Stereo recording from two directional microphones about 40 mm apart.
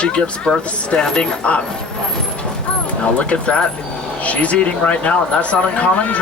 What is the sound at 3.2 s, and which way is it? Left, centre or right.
Speech, left.